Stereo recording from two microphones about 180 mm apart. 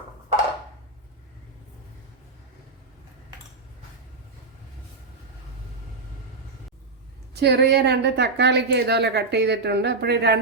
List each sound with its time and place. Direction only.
7.3 s a woman's voice: 65° right (ahead or behind)